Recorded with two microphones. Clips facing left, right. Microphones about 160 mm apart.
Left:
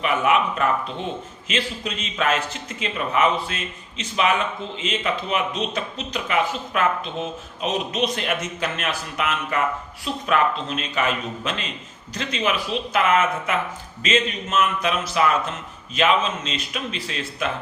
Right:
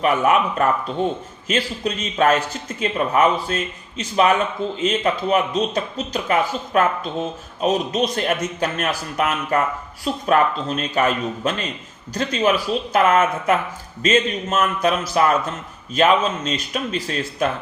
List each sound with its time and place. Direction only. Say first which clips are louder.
0.0 s speech: right 3 dB; 40° right (ahead or behind)